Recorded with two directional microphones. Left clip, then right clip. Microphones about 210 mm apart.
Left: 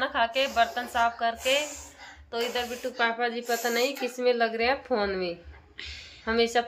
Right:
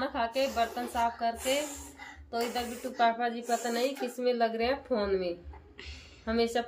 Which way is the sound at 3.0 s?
25° left (ahead or behind).